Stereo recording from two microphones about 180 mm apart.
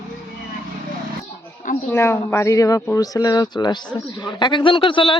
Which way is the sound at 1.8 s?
15° left (ahead or behind).